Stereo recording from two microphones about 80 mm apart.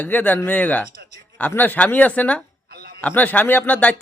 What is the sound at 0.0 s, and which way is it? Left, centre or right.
Speech, left.